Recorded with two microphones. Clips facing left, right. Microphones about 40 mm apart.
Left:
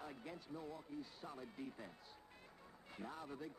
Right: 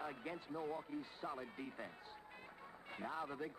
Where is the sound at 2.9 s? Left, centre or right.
Right.